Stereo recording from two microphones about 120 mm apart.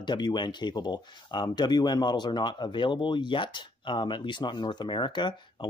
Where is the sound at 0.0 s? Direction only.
40° left (ahead or behind).